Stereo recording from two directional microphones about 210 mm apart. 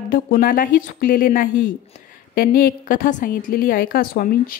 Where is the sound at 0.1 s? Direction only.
40° left (ahead or behind).